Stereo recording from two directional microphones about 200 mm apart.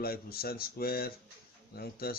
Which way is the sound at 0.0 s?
50° left (ahead or behind).